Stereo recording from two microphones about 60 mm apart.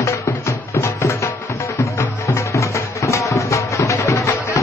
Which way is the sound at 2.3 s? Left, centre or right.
Left.